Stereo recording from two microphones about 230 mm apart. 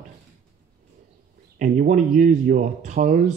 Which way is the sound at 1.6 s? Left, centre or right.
Right.